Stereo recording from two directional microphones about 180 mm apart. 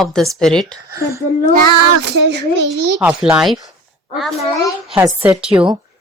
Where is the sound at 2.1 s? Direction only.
70° right (ahead or behind).